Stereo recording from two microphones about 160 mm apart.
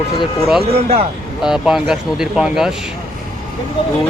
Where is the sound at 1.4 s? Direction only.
5° right (ahead or behind).